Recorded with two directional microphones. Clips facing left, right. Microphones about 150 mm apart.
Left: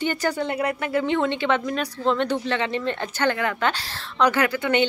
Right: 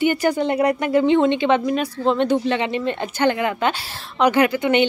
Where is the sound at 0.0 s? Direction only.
10° right (ahead or behind).